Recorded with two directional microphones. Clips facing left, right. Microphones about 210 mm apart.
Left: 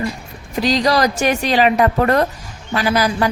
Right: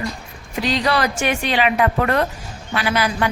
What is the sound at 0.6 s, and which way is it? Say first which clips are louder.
A woman's voice: left 4 dB; 40° left (ahead or behind).